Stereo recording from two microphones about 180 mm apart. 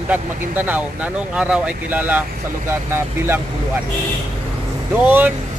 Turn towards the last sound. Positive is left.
turn(degrees=-10)  # may be behind; listen again after turning